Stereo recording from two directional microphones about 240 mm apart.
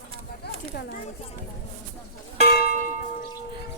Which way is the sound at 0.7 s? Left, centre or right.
Left.